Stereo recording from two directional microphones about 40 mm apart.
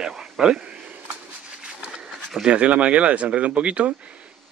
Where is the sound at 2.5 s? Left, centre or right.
Right.